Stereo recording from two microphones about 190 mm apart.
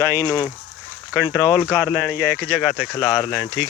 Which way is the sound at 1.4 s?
10° right (ahead or behind).